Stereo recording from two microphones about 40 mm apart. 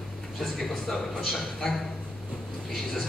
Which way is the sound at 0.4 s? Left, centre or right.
Centre.